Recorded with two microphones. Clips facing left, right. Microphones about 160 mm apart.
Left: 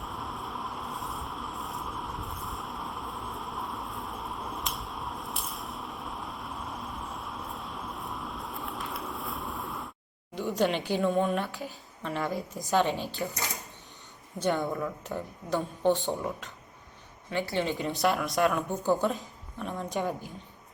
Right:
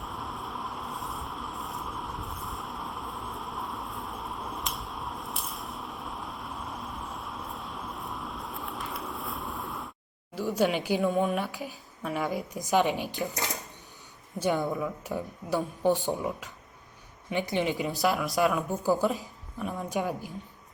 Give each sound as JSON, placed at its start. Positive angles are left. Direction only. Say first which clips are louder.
{"t": 0.0, "sound": "vehicle", "louder": "even", "side_deg": 0}
{"t": 10.3, "sound": "a woman's voice", "louder": "right 1 dB", "side_deg": -5}
{"t": 14.3, "sound": "a woman's voice", "louder": "right 1 dB", "side_deg": -5}
{"t": 17.2, "sound": "a woman's voice", "louder": "right 1 dB", "side_deg": -15}
{"t": 17.7, "sound": "speech", "louder": "even", "side_deg": 0}